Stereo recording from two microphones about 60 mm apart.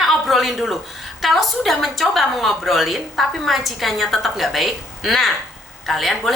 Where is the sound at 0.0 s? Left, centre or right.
Centre.